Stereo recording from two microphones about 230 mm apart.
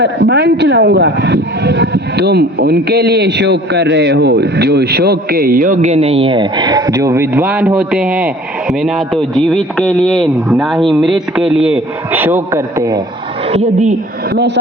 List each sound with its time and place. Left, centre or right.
0.0 s a man's voice: right; by 13.0 s centre
13.5 s a woman's voice: right
14.3 s speech: right